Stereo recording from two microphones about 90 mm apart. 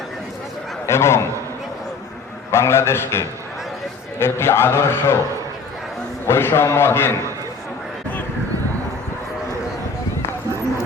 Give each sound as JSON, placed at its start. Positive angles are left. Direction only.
{"t": 0.9, "sound": "a man's voice", "side_deg": 30}
{"t": 2.5, "sound": "a man's voice", "side_deg": 30}
{"t": 6.2, "sound": "a man's voice", "side_deg": 25}